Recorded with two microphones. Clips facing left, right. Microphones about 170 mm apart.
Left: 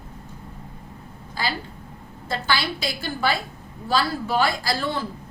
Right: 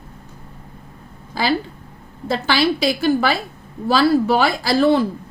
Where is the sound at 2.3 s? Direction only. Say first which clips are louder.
Right 7 dB; 80° right.